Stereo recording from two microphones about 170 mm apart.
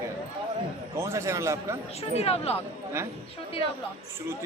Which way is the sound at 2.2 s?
35° left (ahead or behind).